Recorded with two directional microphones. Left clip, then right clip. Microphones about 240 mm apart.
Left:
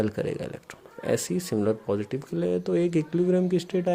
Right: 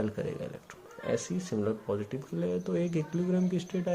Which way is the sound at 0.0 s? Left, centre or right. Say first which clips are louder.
Left 6 dB; left.